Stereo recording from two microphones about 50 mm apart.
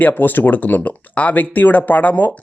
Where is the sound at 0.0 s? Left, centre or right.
Left.